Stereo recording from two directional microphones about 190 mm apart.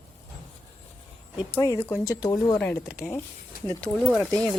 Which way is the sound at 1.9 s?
15° left (ahead or behind).